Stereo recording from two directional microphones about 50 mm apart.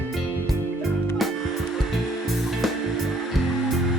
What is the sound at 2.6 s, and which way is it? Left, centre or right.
Music, centre.